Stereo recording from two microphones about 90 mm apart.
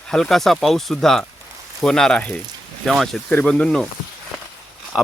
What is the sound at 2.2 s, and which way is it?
Speech, 15° left (ahead or behind).